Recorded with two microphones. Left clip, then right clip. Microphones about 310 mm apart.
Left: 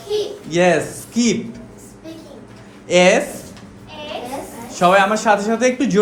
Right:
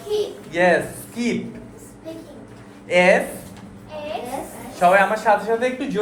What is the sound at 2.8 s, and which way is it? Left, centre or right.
Speech, left.